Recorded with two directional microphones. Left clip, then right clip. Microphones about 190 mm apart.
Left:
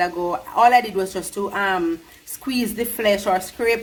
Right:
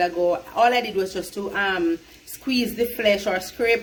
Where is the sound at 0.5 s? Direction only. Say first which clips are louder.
Left 7 dB; 40° left (ahead or behind).